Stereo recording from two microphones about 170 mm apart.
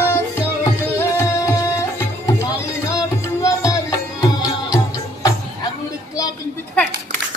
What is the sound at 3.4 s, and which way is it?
Music, 20° left (ahead or behind).